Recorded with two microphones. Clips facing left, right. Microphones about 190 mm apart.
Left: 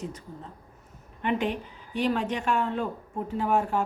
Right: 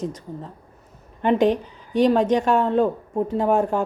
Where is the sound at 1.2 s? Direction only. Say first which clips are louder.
Right 9 dB; 35° right (ahead or behind).